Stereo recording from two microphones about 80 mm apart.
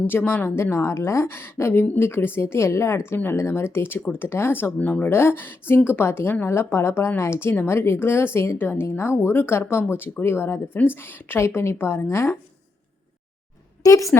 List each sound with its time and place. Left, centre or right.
0.1 s a woman's voice: left
13.8 s a woman's voice: left